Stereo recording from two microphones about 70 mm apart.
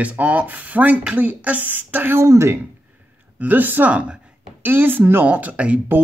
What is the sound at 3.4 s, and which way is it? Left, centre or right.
Speech, right.